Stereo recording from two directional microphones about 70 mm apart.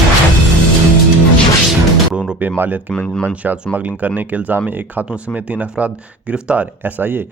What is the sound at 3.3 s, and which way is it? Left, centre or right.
Speech, right.